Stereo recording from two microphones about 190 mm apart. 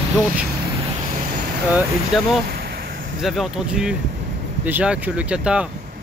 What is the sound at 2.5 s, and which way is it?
Vehicle, 55° right (ahead or behind).